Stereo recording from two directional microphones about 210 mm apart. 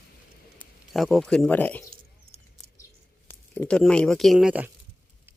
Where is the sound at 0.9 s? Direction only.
Centre (ahead or behind).